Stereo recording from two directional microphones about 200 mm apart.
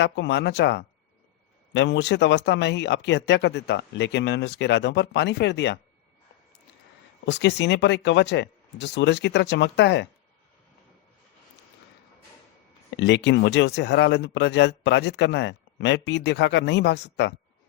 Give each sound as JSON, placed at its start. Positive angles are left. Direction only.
{"t": 0.0, "sound": "speech", "side_deg": 60}
{"t": 7.3, "sound": "speech", "side_deg": 60}
{"t": 13.0, "sound": "speech", "side_deg": 60}